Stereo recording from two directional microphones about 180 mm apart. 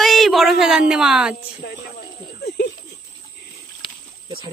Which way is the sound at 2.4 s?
60° left (ahead or behind).